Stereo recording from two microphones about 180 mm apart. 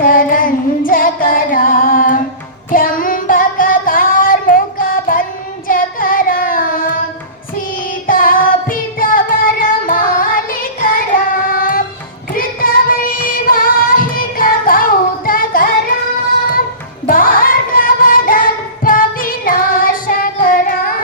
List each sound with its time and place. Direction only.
0.0 s music: 50° left (ahead or behind)
2.7 s singing: 50° left (ahead or behind)
5.6 s child singing: 50° left (ahead or behind)
8.0 s music: 50° left (ahead or behind)
11.5 s child singing: 50° left (ahead or behind)
17.1 s music: 50° left (ahead or behind)